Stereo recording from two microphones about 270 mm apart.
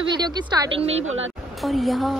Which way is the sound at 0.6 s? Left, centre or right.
Right.